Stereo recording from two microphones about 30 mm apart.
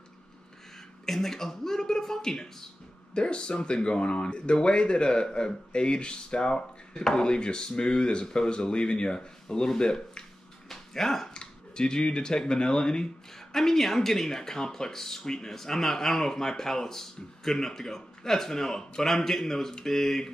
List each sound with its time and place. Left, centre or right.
1.0 s speech: centre
3.2 s speech: left
10.7 s a sound: centre
11.3 s speech: left
13.6 s speech: centre